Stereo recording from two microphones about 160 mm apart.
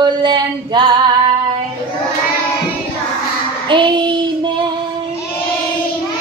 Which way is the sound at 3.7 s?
30° right (ahead or behind).